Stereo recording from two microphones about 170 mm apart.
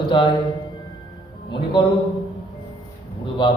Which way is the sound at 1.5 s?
30° left (ahead or behind).